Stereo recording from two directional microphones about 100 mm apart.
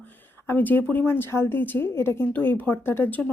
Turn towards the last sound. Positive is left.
turn(degrees=15)  # may be behind; listen again after turning